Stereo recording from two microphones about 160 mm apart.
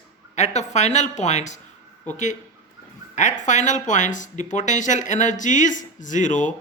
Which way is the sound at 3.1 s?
50° left (ahead or behind).